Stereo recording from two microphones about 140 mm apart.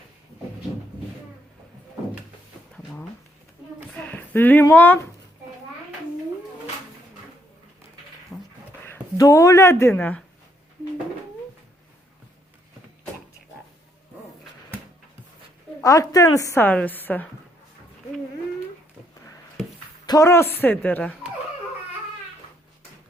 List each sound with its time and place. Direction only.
4.0 s a sound: 10° left (ahead or behind)
4.7 s a woman's voice: 15° left (ahead or behind)
8.3 s a sound: 5° left (ahead or behind)
8.8 s speech: 20° left (ahead or behind)
15.8 s a woman's voice: 25° left (ahead or behind)
20.1 s a woman's voice: 20° left (ahead or behind)